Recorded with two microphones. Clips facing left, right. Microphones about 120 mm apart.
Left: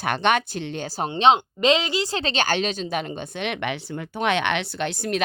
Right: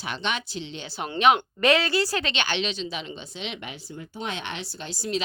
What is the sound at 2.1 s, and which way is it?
A woman's voice, 35° left (ahead or behind).